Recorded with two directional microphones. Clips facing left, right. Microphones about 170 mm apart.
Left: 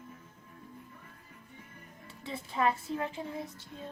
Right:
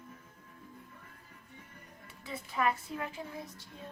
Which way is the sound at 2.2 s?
30° left (ahead or behind).